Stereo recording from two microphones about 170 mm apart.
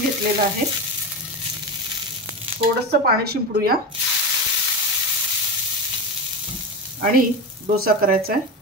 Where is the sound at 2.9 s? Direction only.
65° right (ahead or behind).